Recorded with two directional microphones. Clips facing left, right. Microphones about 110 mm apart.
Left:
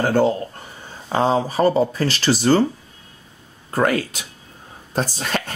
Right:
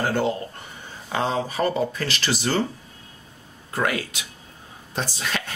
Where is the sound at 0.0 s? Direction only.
40° left (ahead or behind).